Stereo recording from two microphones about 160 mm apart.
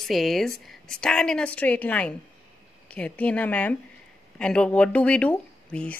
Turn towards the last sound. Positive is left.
turn(degrees=10)  # may be behind; listen again after turning